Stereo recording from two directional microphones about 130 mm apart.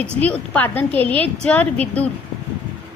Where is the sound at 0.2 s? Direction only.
10° left (ahead or behind).